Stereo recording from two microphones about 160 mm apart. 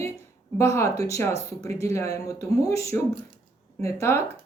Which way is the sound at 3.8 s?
15° left (ahead or behind).